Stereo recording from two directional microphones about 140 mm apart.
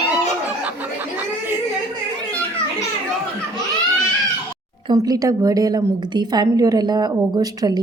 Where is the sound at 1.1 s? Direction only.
15° right (ahead or behind).